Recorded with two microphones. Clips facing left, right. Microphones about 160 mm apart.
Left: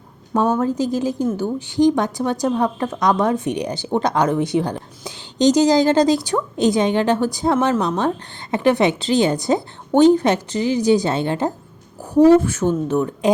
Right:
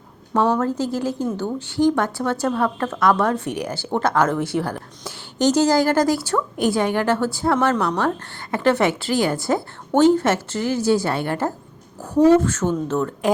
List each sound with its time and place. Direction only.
0.6 s a woman's voice: 15° left (ahead or behind)